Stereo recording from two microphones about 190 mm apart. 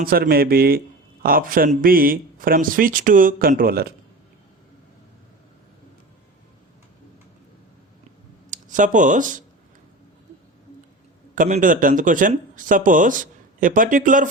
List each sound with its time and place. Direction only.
0.0 s speech: 50° right (ahead or behind)
8.4 s speech: 40° right (ahead or behind)
11.3 s speech: 40° right (ahead or behind)